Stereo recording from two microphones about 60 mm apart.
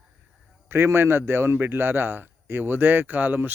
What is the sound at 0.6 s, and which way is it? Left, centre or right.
A man's voice, right.